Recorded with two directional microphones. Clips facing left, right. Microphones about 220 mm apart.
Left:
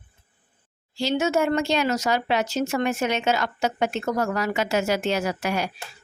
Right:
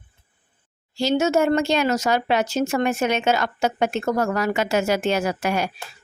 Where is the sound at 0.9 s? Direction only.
40° right (ahead or behind).